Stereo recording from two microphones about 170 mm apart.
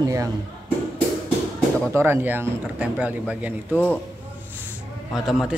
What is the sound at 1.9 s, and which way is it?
Speech, 15° right (ahead or behind).